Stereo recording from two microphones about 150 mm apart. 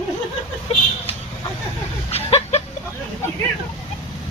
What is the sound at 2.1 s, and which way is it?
Speech, 45° left (ahead or behind).